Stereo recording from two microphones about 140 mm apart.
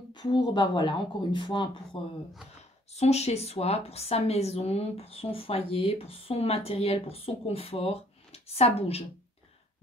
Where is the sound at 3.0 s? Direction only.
50° left (ahead or behind).